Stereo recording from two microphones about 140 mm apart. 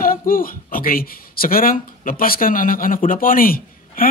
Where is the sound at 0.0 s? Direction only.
90° left.